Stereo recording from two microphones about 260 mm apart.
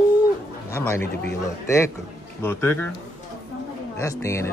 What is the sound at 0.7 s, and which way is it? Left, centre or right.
Speech, centre.